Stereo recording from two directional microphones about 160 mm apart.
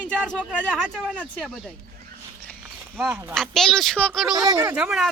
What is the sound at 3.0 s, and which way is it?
Speech, 10° right (ahead or behind).